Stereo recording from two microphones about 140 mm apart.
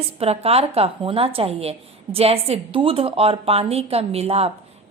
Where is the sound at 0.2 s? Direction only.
45° right (ahead or behind).